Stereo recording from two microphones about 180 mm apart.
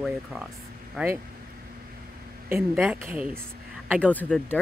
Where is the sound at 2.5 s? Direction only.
10° right (ahead or behind).